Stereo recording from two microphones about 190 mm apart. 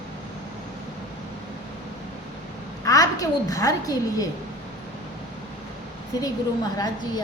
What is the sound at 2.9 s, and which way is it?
A woman's voice, 20° left (ahead or behind).